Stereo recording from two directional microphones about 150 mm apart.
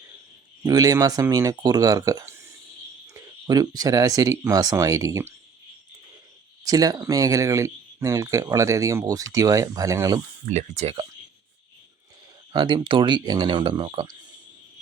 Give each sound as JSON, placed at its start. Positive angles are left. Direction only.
{"t": 0.6, "sound": "speech", "side_deg": -25}
{"t": 6.7, "sound": "speech", "side_deg": -25}
{"t": 10.5, "sound": "speech", "side_deg": -50}
{"t": 12.5, "sound": "speech", "side_deg": -30}